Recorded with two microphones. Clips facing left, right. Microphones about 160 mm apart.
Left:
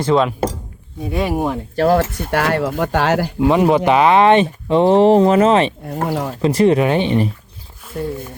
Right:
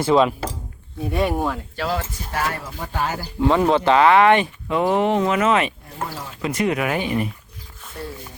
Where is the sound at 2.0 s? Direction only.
65° left (ahead or behind).